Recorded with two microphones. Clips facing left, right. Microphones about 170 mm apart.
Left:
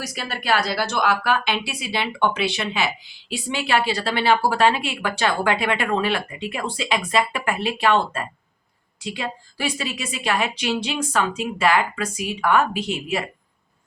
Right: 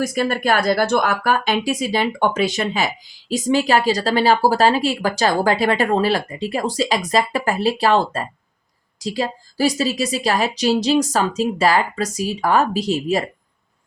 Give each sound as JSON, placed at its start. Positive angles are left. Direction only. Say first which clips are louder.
{"t": 0.0, "sound": "speech", "louder": "right 10 dB", "side_deg": -50}